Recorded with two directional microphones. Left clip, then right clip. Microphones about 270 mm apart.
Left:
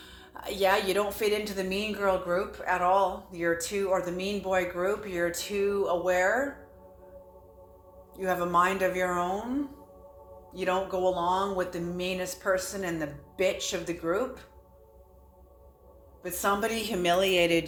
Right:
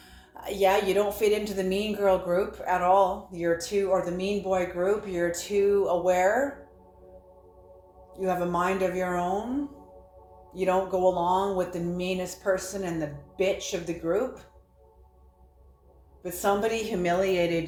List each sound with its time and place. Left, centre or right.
0.3 s a woman's voice: centre
8.1 s a woman's voice: centre
10.5 s a woman's voice: centre
16.2 s a woman's voice: centre